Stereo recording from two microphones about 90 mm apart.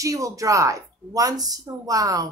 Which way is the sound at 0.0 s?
40° right (ahead or behind).